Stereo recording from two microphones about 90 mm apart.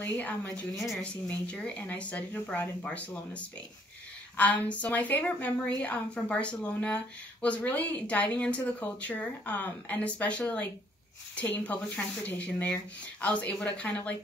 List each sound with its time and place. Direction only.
0.0 s speech: 20° left (ahead or behind)
4.4 s speech: 15° left (ahead or behind)